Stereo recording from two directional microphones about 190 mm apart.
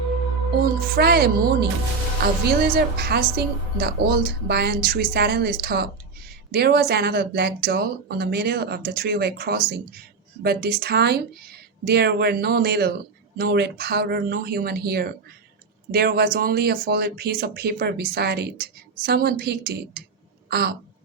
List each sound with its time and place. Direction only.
0.8 s speech: 55° right (ahead or behind)